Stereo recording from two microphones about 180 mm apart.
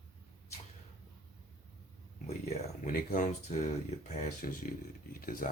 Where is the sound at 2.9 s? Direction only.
55° left (ahead or behind).